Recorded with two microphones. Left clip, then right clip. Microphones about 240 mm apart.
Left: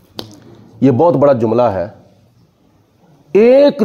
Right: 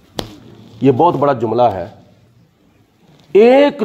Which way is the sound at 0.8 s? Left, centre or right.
Left.